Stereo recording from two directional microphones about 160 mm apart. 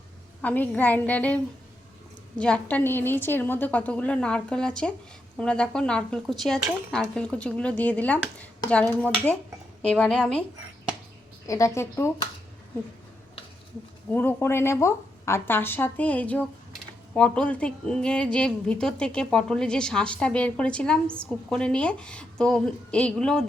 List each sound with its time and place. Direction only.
0.4 s a woman's voice: 10° left (ahead or behind)
2.4 s a woman's voice: 10° left (ahead or behind)
11.4 s a woman's voice: 20° left (ahead or behind)
14.1 s a woman's voice: 10° left (ahead or behind)